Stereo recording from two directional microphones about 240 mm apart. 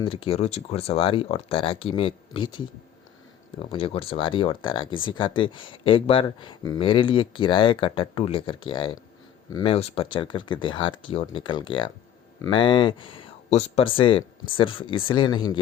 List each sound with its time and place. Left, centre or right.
0.0 s speech: left
3.6 s speech: left